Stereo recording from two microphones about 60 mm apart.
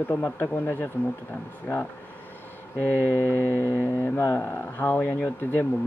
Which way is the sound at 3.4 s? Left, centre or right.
Left.